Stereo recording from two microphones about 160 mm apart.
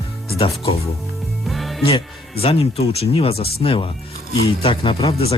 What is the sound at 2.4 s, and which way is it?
Speech, 40° left (ahead or behind).